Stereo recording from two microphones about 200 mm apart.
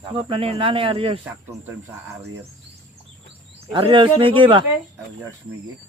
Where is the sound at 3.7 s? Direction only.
25° right (ahead or behind).